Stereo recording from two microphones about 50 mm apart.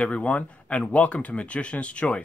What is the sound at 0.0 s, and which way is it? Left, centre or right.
Speech, left.